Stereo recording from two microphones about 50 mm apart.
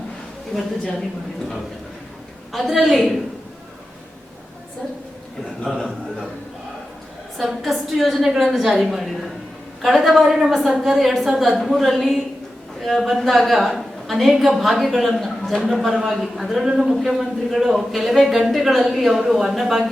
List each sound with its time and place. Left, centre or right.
2.5 s speech: centre
5.6 s speech: centre
7.3 s speech: centre